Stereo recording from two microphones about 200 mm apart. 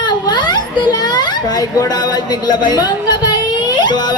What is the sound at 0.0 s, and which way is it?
Children playing, 20° left (ahead or behind).